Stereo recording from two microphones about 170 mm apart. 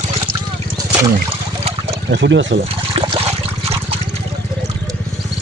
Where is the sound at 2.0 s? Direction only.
90° right.